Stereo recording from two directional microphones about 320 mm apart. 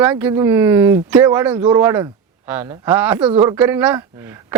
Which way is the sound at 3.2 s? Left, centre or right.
Centre.